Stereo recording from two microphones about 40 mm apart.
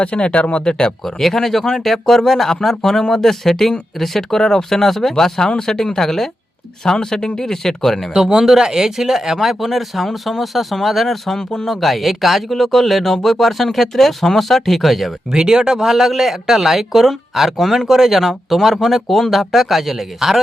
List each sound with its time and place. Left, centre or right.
0.0 s speech: left
1.0 s speech: centre
8.1 s speech: centre
11.3 s speech: centre
11.7 s speech: centre
15.3 s speech: centre